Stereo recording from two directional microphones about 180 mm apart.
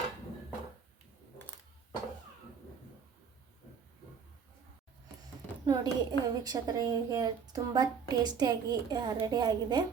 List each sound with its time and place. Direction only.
5.6 s a woman's voice: 20° right (ahead or behind)